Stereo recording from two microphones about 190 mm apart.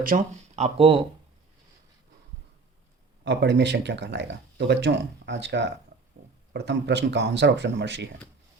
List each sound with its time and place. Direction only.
0.0 s speech: 45° right (ahead or behind); by 1.0 s 30° right (ahead or behind)
3.2 s speech: 60° right (ahead or behind)